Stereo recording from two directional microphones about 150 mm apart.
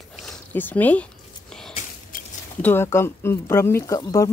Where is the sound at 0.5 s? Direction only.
10° left (ahead or behind).